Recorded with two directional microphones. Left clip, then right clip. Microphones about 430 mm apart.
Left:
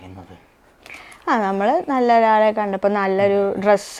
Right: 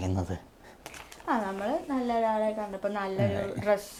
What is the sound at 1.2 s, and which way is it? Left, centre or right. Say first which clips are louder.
A woman's voice: left 12 dB; left.